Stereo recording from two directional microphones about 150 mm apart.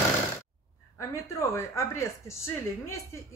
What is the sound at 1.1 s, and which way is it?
Speech, 20° left (ahead or behind).